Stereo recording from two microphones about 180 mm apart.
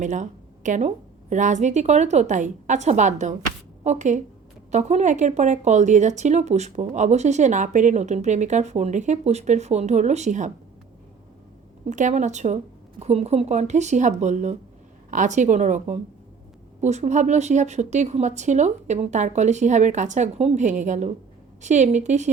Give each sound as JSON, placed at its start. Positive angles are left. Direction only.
{"t": 0.0, "sound": "a woman's voice", "side_deg": -45}
{"t": 11.9, "sound": "a woman's voice", "side_deg": -40}